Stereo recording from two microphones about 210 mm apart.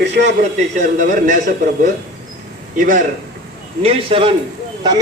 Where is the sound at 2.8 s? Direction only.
40° right (ahead or behind).